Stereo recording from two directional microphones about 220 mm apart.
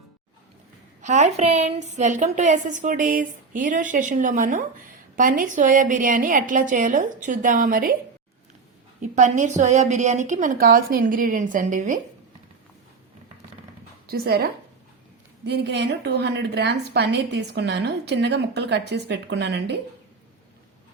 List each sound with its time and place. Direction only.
1.0 s a woman's voice: 30° right (ahead or behind)
9.0 s a woman's voice: 35° right (ahead or behind)
14.1 s a woman's voice: 45° right (ahead or behind)